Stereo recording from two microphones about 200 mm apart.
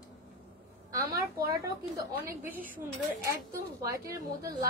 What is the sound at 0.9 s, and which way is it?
Speech, 50° right (ahead or behind).